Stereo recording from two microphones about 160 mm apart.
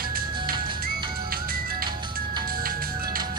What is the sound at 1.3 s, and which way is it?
Music, 65° right (ahead or behind).